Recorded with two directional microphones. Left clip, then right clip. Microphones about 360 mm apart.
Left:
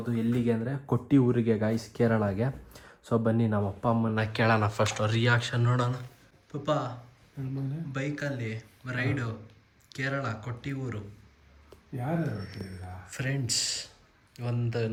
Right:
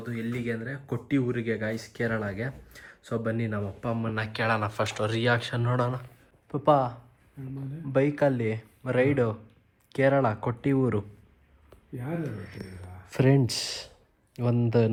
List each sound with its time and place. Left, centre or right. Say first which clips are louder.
0.0 s speech: left 4 dB; centre
7.9 s speech: right 11 dB; centre
12.2 s speech: left 1 dB; centre